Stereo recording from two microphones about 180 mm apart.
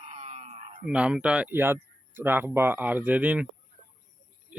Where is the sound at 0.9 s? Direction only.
5° right (ahead or behind).